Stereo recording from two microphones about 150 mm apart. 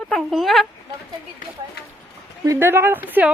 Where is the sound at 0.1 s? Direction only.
Centre (ahead or behind).